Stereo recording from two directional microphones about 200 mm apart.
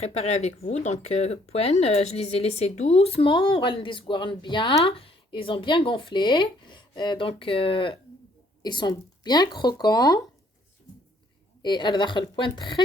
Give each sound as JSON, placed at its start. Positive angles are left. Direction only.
{"t": 0.0, "sound": "speech", "side_deg": 30}
{"t": 11.6, "sound": "speech", "side_deg": 20}